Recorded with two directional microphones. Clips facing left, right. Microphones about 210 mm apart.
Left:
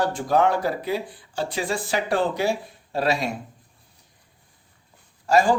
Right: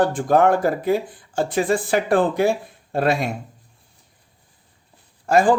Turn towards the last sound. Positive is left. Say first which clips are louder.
# right 2 dB
turn(degrees=-55)  # may be behind; listen again after turning